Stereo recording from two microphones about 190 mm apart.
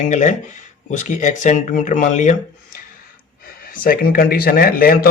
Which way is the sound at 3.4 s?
50° left (ahead or behind).